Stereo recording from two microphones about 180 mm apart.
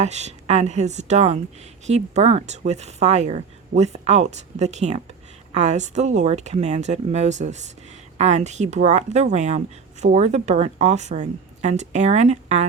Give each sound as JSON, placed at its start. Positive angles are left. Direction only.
{"t": 0.0, "sound": "speech", "side_deg": -40}